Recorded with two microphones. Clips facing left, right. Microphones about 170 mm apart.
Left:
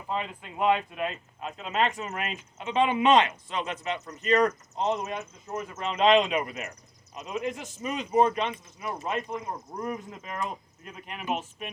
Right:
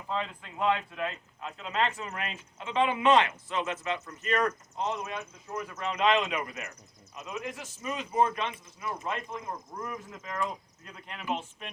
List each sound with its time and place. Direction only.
0.1 s speech: 15° left (ahead or behind)